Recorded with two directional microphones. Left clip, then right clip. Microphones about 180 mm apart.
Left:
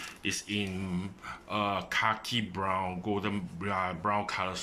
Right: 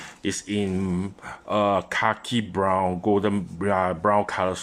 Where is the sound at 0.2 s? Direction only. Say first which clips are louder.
Right 6 dB; 30° right (ahead or behind).